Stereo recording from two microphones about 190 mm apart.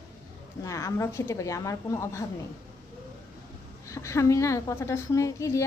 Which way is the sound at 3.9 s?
15° left (ahead or behind).